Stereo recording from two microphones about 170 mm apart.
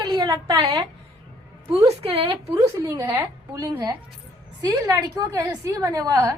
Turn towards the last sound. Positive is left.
turn(degrees=-20)  # may be behind; listen again after turning